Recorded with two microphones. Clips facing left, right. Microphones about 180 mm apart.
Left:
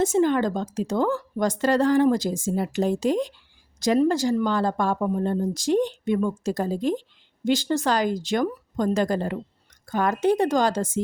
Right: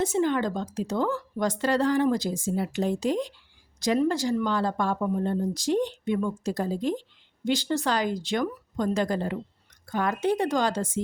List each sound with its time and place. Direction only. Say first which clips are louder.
0.0 s speech: left 4 dB; 45° left (ahead or behind)